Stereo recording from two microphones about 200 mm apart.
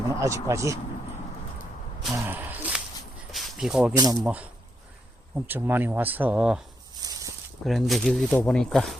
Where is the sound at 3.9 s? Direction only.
20° right (ahead or behind).